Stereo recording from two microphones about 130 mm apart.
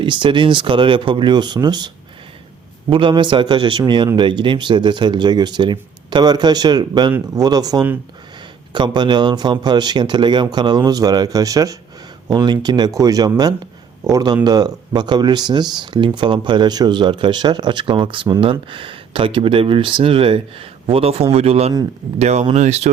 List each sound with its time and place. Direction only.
0.0 s speech: 40° right (ahead or behind)
2.9 s speech: 40° right (ahead or behind); by 22.9 s 60° right (ahead or behind)